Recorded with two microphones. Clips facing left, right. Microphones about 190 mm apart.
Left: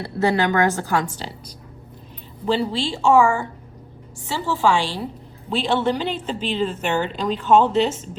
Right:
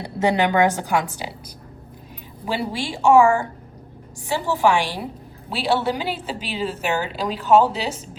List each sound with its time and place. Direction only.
0.0 s a woman's voice: 15° right (ahead or behind)
2.4 s a woman's voice: 10° right (ahead or behind)
4.3 s a woman's voice: 15° right (ahead or behind)